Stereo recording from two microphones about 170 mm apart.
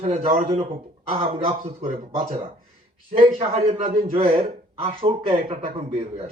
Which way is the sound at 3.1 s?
35° right (ahead or behind).